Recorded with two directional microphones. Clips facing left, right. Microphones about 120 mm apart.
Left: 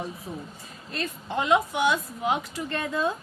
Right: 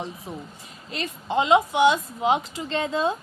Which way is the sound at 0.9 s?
25° right (ahead or behind).